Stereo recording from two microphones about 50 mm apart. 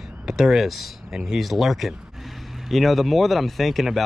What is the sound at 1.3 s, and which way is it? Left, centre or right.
Speech, centre.